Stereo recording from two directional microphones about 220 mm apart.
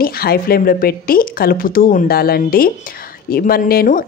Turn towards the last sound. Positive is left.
turn(degrees=40)  # may be behind; listen again after turning